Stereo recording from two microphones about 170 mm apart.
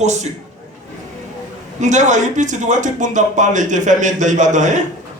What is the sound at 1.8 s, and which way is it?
Speech, 45° right (ahead or behind).